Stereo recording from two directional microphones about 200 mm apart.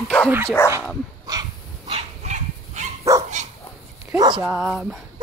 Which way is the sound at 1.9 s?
35° right (ahead or behind).